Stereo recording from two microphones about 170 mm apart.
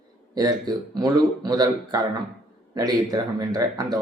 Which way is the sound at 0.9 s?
25° right (ahead or behind).